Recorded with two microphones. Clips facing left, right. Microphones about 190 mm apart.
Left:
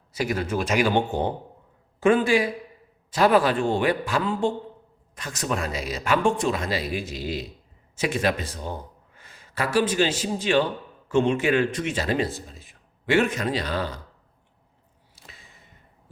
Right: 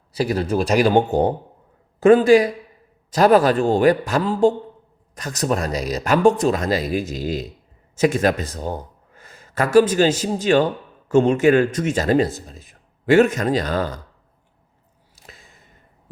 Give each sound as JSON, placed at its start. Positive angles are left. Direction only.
{"t": 0.1, "sound": "speech", "side_deg": -35}